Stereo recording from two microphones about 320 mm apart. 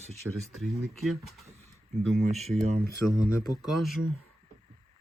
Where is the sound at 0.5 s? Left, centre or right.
Centre.